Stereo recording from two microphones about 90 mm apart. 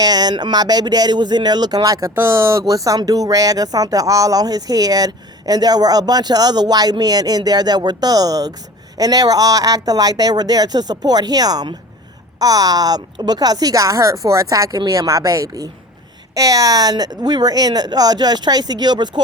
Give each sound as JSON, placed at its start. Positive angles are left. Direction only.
{"t": 0.0, "sound": "speech", "side_deg": -50}
{"t": 2.1, "sound": "speech", "side_deg": -30}